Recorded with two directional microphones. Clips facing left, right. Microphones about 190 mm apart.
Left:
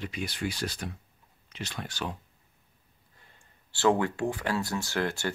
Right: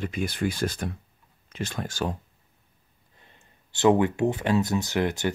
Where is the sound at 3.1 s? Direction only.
20° right (ahead or behind).